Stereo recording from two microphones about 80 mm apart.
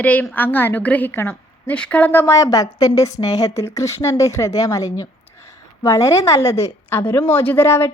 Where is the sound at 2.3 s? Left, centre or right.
Left.